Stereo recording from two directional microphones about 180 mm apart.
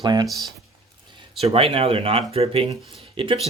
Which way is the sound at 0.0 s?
25° right (ahead or behind).